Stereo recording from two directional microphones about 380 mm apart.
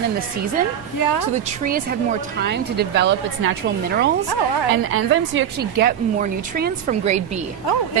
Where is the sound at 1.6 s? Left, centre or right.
Right.